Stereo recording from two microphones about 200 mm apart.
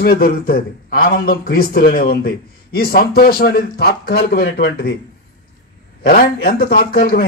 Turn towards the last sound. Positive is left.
turn(degrees=50)  # may be behind; listen again after turning